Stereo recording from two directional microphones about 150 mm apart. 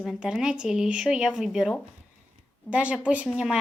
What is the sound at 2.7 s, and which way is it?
Speech, 10° right (ahead or behind).